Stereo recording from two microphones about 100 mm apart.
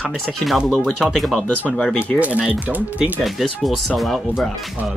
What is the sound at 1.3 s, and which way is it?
Speech, 15° left (ahead or behind).